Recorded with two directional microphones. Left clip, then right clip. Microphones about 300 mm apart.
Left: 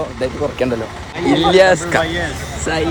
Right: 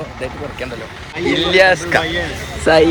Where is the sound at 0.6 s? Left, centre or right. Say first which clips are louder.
Left 9 dB; left.